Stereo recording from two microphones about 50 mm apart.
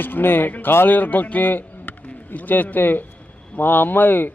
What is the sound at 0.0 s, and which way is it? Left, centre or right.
A man's voice, left.